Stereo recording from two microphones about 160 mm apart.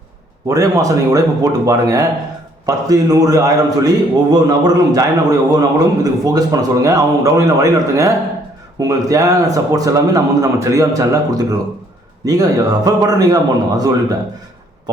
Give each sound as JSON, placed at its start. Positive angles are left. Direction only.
{"t": 0.4, "sound": "a man's voice", "side_deg": -20}